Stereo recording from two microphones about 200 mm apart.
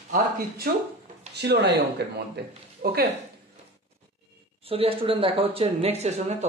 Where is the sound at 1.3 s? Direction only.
55° right (ahead or behind).